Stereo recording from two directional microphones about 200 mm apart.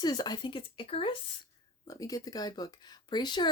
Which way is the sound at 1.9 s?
15° left (ahead or behind).